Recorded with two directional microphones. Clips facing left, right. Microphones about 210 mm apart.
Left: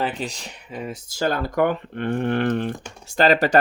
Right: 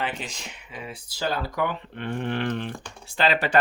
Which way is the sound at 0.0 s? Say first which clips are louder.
Left 5 dB; 35° left (ahead or behind).